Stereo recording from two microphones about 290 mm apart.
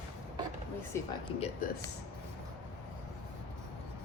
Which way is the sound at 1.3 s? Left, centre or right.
Centre.